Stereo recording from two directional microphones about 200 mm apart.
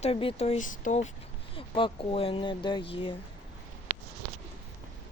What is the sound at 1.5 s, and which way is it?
Speech, 25° left (ahead or behind).